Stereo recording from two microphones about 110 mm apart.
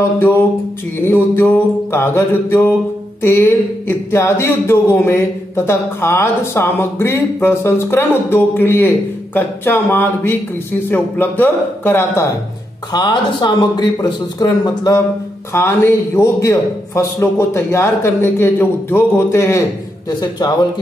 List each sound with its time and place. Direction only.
1.0 s speech: 20° left (ahead or behind)
12.9 s speech: 40° left (ahead or behind)
15.5 s speech: 25° left (ahead or behind)
20.1 s speech: 35° left (ahead or behind)